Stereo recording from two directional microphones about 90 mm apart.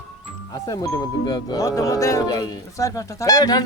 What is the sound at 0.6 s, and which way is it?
Speech, 45° left (ahead or behind).